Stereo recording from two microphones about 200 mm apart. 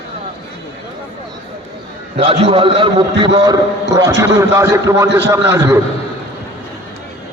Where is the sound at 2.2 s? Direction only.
30° right (ahead or behind); by 5.8 s 15° right (ahead or behind).